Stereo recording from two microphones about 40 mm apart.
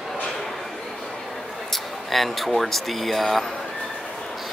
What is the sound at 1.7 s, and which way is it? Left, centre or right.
Speech, centre.